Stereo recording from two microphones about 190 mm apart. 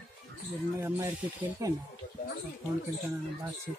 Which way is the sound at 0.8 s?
15° right (ahead or behind).